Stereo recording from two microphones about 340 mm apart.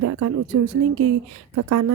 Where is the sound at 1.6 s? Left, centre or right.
Right.